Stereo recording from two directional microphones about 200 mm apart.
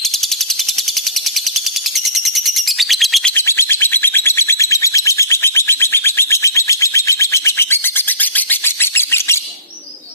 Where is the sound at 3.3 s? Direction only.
10° left (ahead or behind).